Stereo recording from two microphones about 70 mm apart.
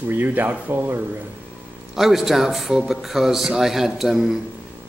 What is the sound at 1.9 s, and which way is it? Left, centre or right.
A man's voice, centre.